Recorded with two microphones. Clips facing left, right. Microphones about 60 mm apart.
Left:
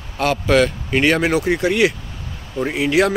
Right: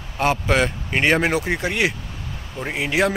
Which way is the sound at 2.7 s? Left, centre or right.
Right.